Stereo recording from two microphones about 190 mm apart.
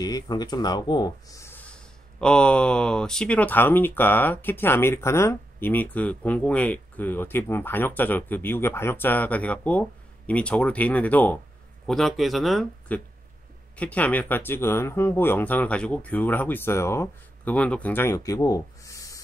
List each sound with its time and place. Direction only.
0.0 s speech: 20° left (ahead or behind)